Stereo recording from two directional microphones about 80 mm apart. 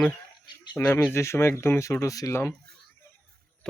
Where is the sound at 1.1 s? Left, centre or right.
Left.